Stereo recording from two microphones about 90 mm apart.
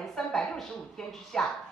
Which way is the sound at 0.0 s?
5° left (ahead or behind).